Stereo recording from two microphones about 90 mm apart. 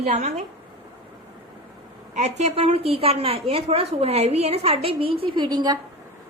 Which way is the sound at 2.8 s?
90° right.